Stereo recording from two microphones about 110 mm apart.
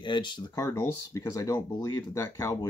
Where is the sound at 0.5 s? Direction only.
25° left (ahead or behind).